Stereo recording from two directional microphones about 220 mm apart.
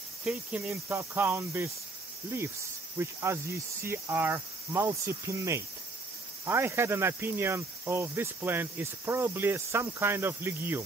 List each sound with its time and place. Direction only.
0.2 s cricket: 5° right (ahead or behind)
3.0 s cricket: 10° right (ahead or behind)